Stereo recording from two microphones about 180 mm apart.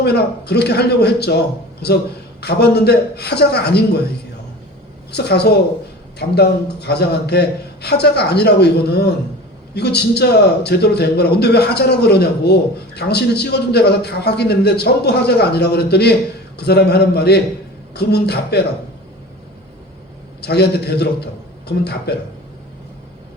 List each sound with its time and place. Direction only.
0.0 s a man's voice: 65° left (ahead or behind)
5.1 s a man's voice: 65° left (ahead or behind)
20.4 s a man's voice: 65° left (ahead or behind)